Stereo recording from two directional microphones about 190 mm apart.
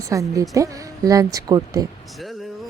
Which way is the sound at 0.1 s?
15° right (ahead or behind).